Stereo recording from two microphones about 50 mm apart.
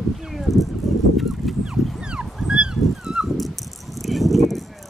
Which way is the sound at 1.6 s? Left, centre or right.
Centre.